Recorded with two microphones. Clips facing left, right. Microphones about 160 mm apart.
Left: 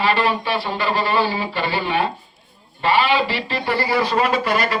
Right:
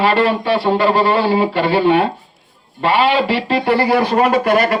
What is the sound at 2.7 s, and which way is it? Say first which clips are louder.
A man's voice: right 3 dB; 60° right (ahead or behind).